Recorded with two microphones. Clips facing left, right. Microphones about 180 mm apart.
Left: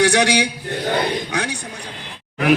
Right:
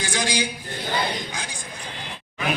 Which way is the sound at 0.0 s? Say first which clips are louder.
Left 10 dB; 70° left (ahead or behind).